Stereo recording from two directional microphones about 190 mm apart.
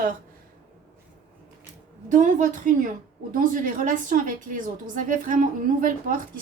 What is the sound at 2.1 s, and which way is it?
Speech, 40° right (ahead or behind).